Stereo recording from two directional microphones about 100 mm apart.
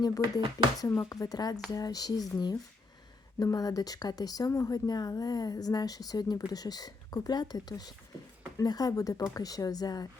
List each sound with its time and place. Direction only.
0.0 s speech: 40° left (ahead or behind)
3.4 s speech: 40° left (ahead or behind)